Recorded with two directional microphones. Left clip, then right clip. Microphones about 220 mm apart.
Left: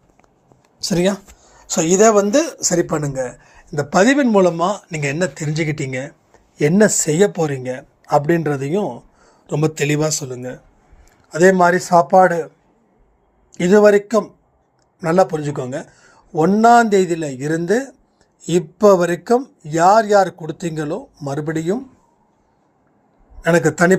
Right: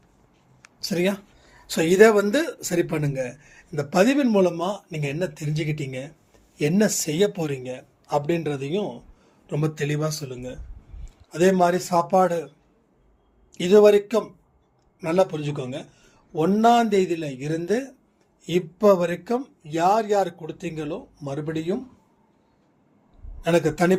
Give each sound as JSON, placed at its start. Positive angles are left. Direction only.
{"t": 0.8, "sound": "speech", "side_deg": 35}
{"t": 2.3, "sound": "speech", "side_deg": 20}
{"t": 3.2, "sound": "a man's voice", "side_deg": 0}
{"t": 3.7, "sound": "speech", "side_deg": 15}
{"t": 13.5, "sound": "speech", "side_deg": 25}
{"t": 23.4, "sound": "speech", "side_deg": 30}